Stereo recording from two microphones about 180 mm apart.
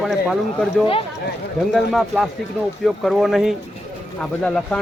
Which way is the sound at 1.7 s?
Centre (ahead or behind).